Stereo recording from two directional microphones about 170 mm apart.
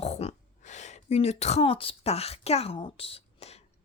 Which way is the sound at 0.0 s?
40° left (ahead or behind).